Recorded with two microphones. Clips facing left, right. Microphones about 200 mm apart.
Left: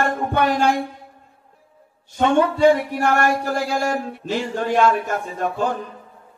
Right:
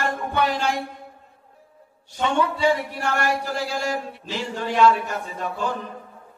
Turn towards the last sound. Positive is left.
turn(degrees=50)  # may be behind; listen again after turning